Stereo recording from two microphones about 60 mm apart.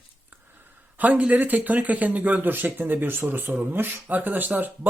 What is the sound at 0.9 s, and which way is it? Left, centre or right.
Speech, right.